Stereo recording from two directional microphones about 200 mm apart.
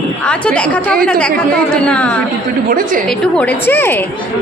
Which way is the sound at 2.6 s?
45° right (ahead or behind).